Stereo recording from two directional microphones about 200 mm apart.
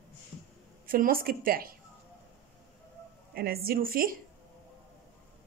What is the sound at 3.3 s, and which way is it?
Speech, 50° right (ahead or behind).